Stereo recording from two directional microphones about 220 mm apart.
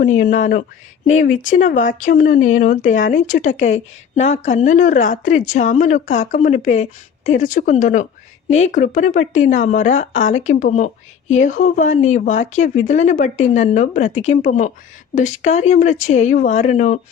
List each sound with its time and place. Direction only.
0.2 s speech: 35° left (ahead or behind)